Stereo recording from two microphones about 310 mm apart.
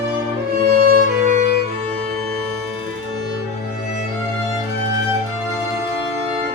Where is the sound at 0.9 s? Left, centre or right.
Right.